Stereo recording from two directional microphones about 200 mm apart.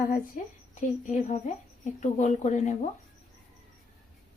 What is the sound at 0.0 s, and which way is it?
A woman's voice, 45° left (ahead or behind).